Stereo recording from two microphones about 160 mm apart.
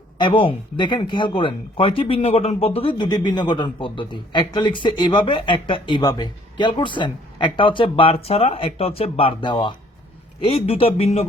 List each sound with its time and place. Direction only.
0.2 s speech: 30° left (ahead or behind)